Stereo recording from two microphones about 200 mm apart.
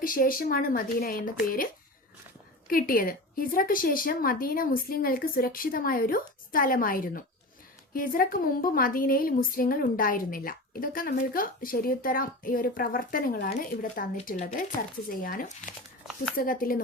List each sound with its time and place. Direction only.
0.0 s a woman's voice: 45° left (ahead or behind)
2.6 s a woman's voice: 45° left (ahead or behind)